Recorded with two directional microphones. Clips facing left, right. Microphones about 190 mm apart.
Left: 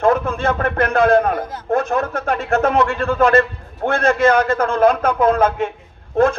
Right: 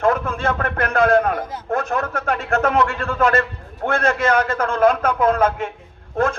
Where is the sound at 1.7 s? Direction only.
30° left (ahead or behind).